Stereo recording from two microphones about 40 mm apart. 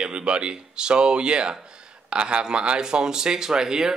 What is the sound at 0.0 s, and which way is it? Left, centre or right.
A man's voice, right.